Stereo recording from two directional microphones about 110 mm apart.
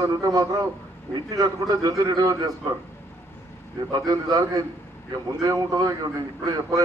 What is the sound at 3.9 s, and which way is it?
A man's voice, 35° right (ahead or behind).